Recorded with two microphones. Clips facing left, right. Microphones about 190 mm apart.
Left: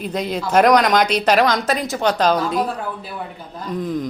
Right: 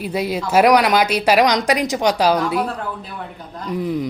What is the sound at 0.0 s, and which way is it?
A woman's voice, 5° right (ahead or behind).